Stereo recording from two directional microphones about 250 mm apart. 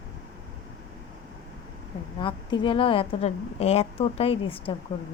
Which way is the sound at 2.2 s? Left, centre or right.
Centre.